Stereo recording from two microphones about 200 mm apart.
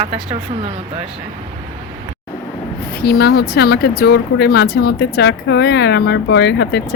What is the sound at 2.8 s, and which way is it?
Speech, 50° left (ahead or behind).